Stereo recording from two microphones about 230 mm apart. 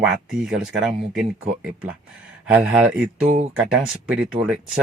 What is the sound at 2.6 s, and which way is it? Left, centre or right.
Speech, centre.